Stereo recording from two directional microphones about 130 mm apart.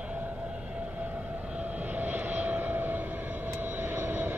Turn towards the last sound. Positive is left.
turn(degrees=-15)  # may be behind; listen again after turning